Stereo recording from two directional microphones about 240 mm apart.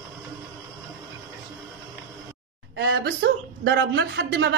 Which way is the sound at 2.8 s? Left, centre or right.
Right.